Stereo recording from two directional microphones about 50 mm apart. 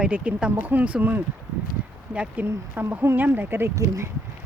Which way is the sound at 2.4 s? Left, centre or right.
Right.